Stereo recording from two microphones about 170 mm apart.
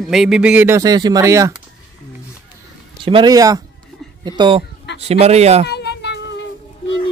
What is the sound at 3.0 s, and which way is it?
Speech, 25° right (ahead or behind).